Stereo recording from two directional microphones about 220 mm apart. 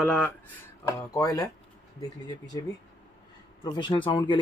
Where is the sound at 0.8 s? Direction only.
15° left (ahead or behind).